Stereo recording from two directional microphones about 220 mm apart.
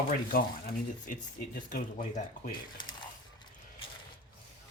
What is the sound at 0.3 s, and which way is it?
Speech, 40° left (ahead or behind).